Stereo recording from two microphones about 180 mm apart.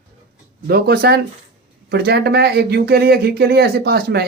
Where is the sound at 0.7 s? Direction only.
60° right (ahead or behind).